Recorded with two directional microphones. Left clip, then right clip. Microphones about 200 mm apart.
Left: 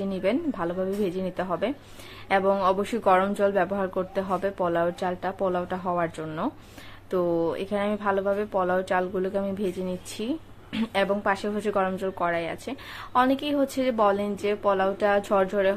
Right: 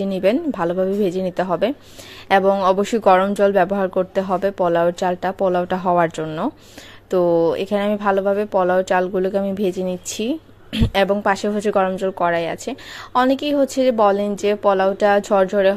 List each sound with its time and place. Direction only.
0.0 s speech: 35° right (ahead or behind)